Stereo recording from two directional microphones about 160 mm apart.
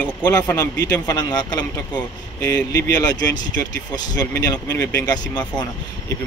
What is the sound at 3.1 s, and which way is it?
Speech, 25° left (ahead or behind).